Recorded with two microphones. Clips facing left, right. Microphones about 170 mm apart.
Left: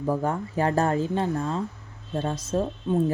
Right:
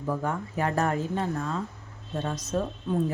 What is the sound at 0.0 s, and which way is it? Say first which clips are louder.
A woman's voice: left 4 dB; 35° left (ahead or behind).